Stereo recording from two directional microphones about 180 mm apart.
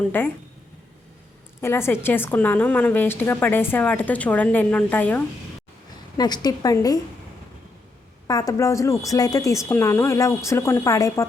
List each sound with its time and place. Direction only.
0.0 s a woman's voice: 10° left (ahead or behind)
1.6 s a woman's voice: 15° left (ahead or behind)
6.1 s a woman's voice: 20° left (ahead or behind)
8.3 s a woman's voice: 20° left (ahead or behind)